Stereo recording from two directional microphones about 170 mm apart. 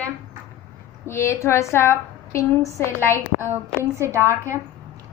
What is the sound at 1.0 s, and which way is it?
A woman's voice, 15° left (ahead or behind).